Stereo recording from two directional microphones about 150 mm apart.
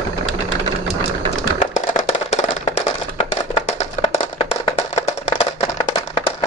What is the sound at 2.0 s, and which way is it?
Music, 45° left (ahead or behind).